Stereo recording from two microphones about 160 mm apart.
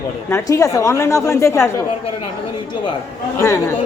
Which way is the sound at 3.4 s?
15° left (ahead or behind).